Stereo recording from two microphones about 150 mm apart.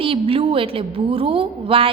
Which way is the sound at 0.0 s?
35° right (ahead or behind).